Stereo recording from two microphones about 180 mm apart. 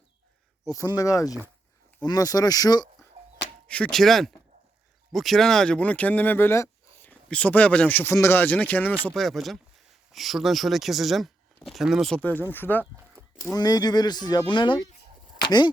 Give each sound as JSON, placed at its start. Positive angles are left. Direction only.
{"t": 0.6, "sound": "speech", "side_deg": 20}
{"t": 3.7, "sound": "speech", "side_deg": 5}